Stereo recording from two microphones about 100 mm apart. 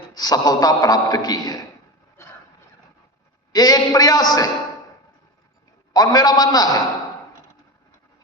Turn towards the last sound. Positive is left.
turn(degrees=40)  # may be behind; listen again after turning